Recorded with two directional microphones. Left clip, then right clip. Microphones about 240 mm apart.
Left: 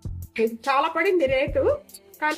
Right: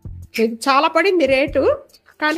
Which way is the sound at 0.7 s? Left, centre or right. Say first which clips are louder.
Right 7 dB; right.